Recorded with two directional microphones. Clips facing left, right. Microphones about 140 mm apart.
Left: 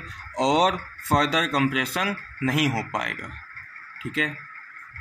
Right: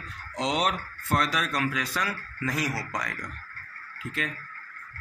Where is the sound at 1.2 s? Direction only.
85° left; by 3.2 s 65° left (ahead or behind).